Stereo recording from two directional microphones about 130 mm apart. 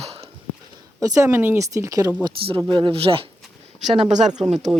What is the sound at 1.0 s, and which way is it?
Speech, 25° right (ahead or behind).